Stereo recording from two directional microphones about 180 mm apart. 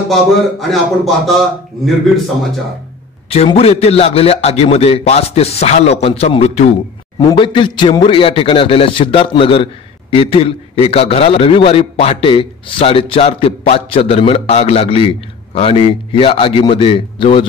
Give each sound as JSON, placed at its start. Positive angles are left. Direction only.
{"t": 0.1, "sound": "speech", "side_deg": 0}
{"t": 3.3, "sound": "a man's voice", "side_deg": 35}
{"t": 7.2, "sound": "a man's voice", "side_deg": 25}